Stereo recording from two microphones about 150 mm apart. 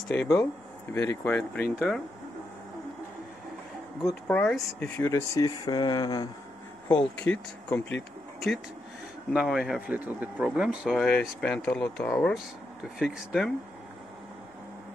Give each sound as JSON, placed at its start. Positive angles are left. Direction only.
{"t": 0.1, "sound": "speech", "side_deg": 15}
{"t": 4.0, "sound": "speech", "side_deg": 5}
{"t": 5.4, "sound": "speech", "side_deg": 30}
{"t": 6.9, "sound": "speech", "side_deg": 10}
{"t": 9.3, "sound": "speech", "side_deg": -5}